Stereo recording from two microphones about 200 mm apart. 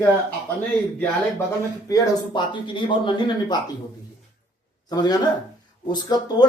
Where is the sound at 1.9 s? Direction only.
20° left (ahead or behind).